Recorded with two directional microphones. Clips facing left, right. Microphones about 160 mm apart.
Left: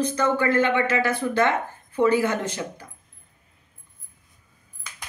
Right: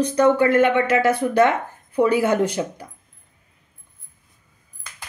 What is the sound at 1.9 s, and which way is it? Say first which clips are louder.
Speech: right 3 dB; 10° right (ahead or behind).